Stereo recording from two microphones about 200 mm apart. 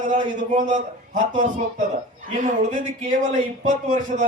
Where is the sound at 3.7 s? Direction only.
40° right (ahead or behind).